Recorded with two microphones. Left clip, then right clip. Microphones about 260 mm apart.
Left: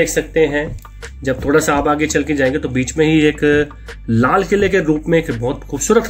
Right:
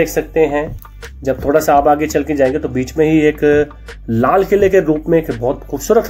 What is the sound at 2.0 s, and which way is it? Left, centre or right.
Speech, centre.